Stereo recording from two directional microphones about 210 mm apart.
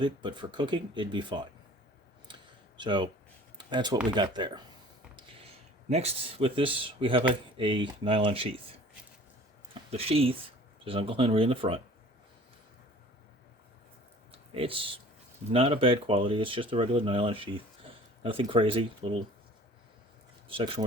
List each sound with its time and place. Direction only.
0.0 s speech: 20° right (ahead or behind)
2.7 s speech: 20° right (ahead or behind)
5.9 s speech: 30° right (ahead or behind)
9.9 s speech: 30° right (ahead or behind)
14.5 s speech: 25° right (ahead or behind)
20.5 s speech: 25° right (ahead or behind)